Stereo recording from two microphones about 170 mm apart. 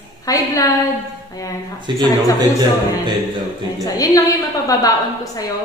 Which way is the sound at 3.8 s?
20° left (ahead or behind).